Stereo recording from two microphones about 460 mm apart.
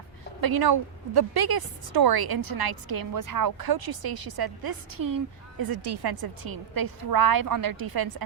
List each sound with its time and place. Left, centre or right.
0.4 s a woman's voice: right